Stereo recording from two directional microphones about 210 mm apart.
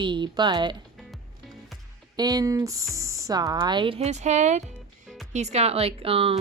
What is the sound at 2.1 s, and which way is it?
A woman's voice, 20° right (ahead or behind).